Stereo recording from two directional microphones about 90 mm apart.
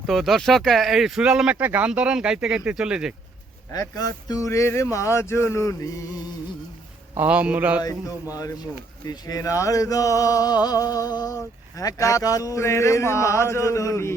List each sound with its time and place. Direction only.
0.0 s speech: centre (ahead or behind)
1.5 s speech: 20° right (ahead or behind)
1.9 s speech: 10° right (ahead or behind)
3.7 s speech: 40° left (ahead or behind)
7.3 s speech: 15° right (ahead or behind)
7.8 s speech: 40° left (ahead or behind)